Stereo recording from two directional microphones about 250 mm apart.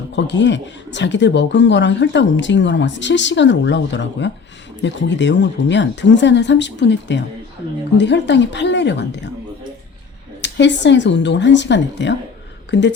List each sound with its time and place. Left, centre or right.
0.1 s speech: left
10.4 s speech: left